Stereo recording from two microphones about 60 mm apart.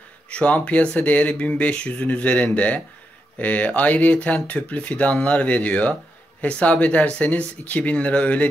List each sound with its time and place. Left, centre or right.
0.3 s speech: left